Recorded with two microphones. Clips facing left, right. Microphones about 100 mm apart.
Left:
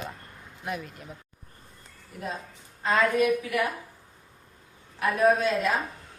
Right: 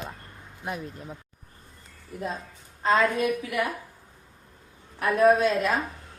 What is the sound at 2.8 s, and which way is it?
Speech, 30° right (ahead or behind).